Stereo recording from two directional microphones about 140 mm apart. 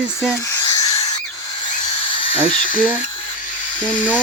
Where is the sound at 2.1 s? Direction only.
35° left (ahead or behind).